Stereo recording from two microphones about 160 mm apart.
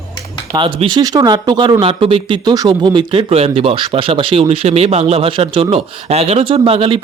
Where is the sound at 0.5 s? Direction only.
30° right (ahead or behind).